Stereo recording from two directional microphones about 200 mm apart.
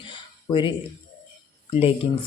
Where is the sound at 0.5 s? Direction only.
25° left (ahead or behind).